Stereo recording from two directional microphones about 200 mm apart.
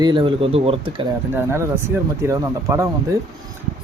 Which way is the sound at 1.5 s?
10° right (ahead or behind).